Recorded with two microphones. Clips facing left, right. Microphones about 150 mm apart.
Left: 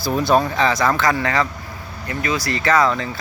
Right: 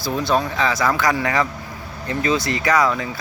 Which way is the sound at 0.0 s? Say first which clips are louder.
Left 3 dB; 5° left (ahead or behind).